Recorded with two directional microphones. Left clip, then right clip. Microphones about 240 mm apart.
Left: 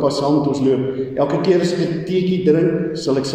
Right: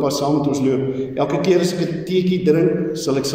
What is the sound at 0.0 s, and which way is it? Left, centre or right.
A man's voice, centre.